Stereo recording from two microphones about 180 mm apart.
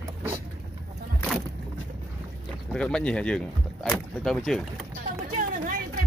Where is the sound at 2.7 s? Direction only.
5° left (ahead or behind).